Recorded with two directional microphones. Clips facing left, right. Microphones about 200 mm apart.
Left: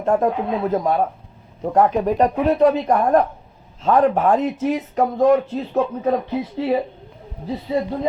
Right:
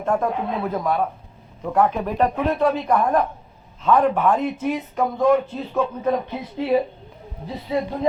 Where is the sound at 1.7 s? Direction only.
35° left (ahead or behind).